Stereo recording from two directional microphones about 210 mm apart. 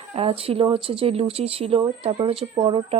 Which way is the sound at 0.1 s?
25° right (ahead or behind).